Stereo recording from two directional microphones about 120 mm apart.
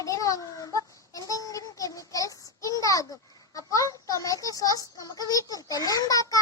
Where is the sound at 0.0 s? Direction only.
30° left (ahead or behind).